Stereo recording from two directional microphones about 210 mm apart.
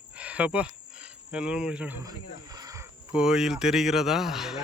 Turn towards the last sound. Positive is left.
turn(degrees=0)  # may be behind; listen again after turning